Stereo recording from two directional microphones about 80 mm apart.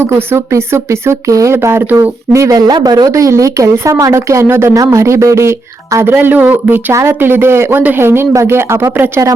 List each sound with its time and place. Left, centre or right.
0.0 s speech: right
2.0 s speech: right
2.7 s speech: right
3.1 s speech: right
6.1 s speech: right
6.9 s speech: right